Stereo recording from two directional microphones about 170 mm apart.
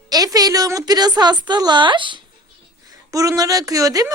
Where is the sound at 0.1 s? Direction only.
20° right (ahead or behind).